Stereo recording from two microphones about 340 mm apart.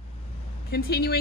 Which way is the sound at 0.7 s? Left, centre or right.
Left.